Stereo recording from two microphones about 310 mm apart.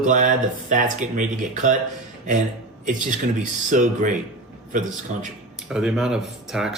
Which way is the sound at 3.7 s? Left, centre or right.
Right.